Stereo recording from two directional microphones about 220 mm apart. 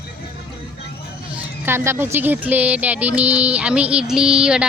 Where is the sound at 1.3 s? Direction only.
10° right (ahead or behind).